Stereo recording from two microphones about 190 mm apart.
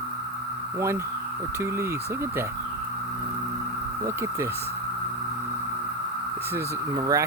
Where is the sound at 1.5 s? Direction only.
15° right (ahead or behind).